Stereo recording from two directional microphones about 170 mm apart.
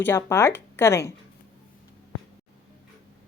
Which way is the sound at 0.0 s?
15° left (ahead or behind).